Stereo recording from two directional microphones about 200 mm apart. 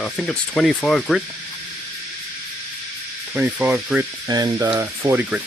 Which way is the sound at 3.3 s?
5° right (ahead or behind).